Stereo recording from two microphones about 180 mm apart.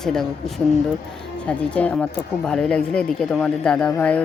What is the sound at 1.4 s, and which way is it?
A woman's voice, 5° left (ahead or behind).